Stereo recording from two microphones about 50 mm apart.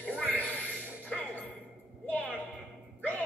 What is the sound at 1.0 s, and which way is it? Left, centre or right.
Music, left.